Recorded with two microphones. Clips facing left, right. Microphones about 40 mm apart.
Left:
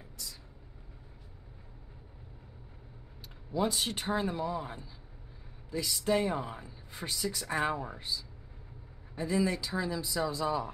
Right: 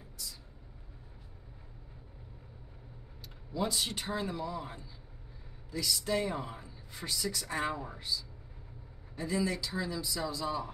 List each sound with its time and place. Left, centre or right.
3.5 s speech: left